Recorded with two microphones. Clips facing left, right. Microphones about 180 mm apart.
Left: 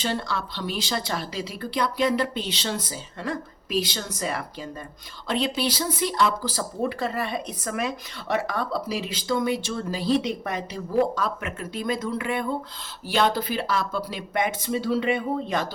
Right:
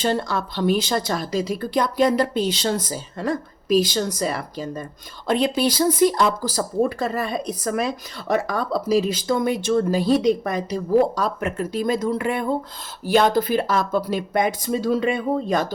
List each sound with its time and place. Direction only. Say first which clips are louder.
0.0 s speech: right 5 dB; 45° right (ahead or behind)